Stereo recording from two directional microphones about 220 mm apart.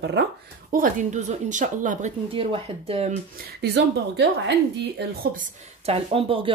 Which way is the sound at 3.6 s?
50° right (ahead or behind).